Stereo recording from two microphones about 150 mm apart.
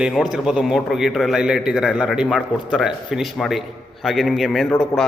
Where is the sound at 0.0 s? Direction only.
5° right (ahead or behind).